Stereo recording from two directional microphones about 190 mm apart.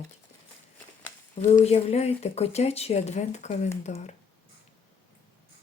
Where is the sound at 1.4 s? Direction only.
35° left (ahead or behind).